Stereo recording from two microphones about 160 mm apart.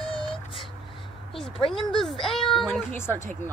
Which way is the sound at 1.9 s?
Centre (ahead or behind).